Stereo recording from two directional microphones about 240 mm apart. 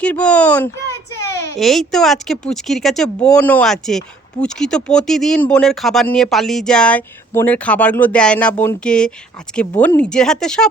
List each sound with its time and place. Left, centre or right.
0.0 s speech: centre